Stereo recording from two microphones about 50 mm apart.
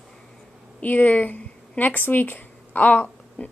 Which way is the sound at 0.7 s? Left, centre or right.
Left.